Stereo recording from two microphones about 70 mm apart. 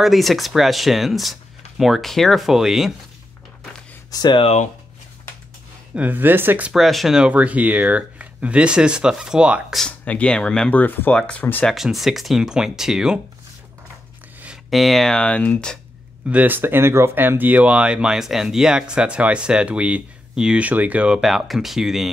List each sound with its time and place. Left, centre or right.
0.0 s speech: centre
4.1 s speech: left
5.9 s speech: right
6.7 s speech: centre
7.2 s speech: right
9.8 s speech: centre
10.7 s speech: left
11.1 s speech: centre
11.7 s speech: centre
14.7 s speech: centre
16.3 s speech: right
21.2 s speech: centre